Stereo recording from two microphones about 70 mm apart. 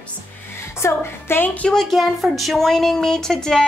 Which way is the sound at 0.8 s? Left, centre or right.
Left.